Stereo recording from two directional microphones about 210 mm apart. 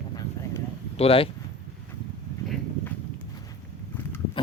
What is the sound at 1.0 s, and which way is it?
Speech, 25° left (ahead or behind).